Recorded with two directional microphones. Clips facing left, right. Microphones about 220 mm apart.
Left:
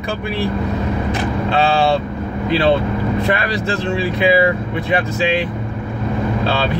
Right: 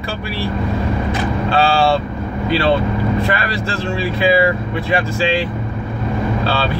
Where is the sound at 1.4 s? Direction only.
20° left (ahead or behind).